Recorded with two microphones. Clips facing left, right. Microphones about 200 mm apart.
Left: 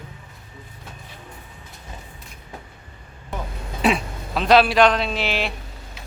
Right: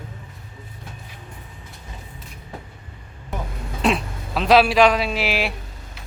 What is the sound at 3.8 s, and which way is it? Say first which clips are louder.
A man's voice: even; centre (ahead or behind).